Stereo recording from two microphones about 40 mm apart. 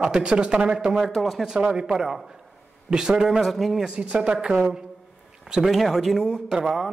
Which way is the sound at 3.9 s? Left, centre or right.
Right.